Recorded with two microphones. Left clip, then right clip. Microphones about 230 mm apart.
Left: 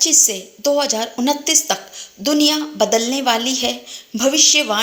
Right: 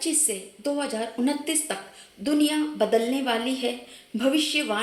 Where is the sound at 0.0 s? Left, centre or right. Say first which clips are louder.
Left 12 dB; left.